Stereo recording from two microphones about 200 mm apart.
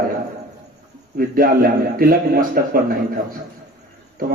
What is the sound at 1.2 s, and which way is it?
A man's voice, 45° right (ahead or behind).